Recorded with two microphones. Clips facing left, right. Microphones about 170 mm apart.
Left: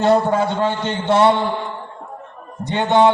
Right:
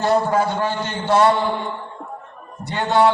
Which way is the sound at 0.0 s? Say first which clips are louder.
Left 2 dB; 25° left (ahead or behind).